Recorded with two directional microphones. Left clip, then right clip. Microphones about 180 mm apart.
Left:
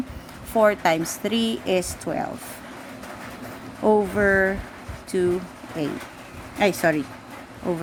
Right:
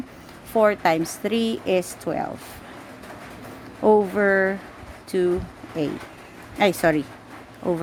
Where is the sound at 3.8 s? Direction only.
20° right (ahead or behind).